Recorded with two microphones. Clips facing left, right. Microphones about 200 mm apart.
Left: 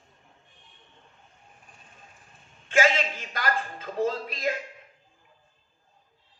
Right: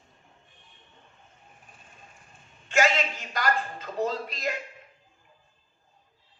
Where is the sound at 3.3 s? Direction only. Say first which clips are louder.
Right 2 dB; 50° left (ahead or behind).